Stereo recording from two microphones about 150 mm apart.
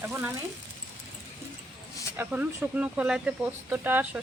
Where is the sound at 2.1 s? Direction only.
10° right (ahead or behind).